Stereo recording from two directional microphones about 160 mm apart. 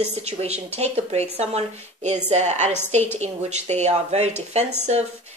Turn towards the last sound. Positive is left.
turn(degrees=-45)  # may be behind; listen again after turning